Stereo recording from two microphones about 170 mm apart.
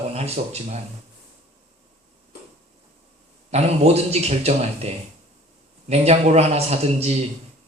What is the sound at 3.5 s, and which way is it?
A man's voice, 40° right (ahead or behind).